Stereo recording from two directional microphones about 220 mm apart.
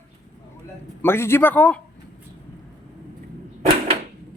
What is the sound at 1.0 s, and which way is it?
Speech, 10° left (ahead or behind).